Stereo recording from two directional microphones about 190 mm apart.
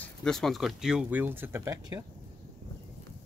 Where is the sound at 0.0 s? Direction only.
5° left (ahead or behind); by 2.0 s 15° right (ahead or behind).